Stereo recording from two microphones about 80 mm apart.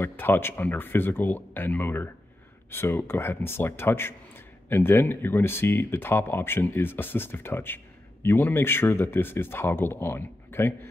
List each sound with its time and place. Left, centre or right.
0.0 s speech: left